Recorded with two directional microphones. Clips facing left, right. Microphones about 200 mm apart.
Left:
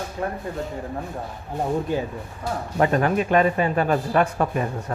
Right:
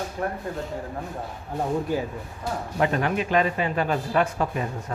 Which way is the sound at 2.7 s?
45° left (ahead or behind).